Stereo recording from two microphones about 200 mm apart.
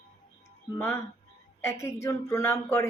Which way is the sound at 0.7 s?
10° left (ahead or behind).